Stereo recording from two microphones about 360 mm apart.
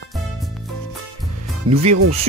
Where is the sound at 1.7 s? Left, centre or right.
Right.